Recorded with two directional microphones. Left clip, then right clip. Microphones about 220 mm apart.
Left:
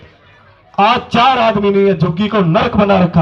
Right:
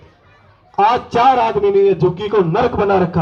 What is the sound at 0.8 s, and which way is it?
A man's voice, 40° left (ahead or behind).